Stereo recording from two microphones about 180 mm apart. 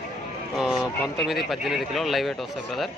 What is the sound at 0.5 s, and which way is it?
Speech, centre (ahead or behind).